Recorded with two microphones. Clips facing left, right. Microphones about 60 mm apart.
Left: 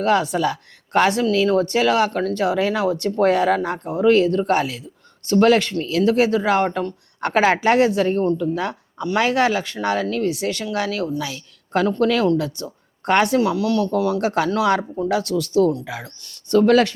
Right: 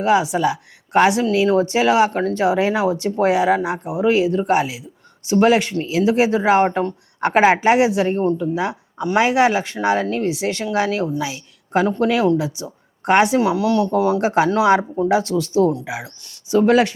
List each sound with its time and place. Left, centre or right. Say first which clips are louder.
0.0 s a woman's voice: right 2 dB; centre